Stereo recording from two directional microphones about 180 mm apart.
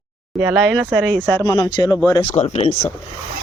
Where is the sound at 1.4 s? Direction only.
20° left (ahead or behind).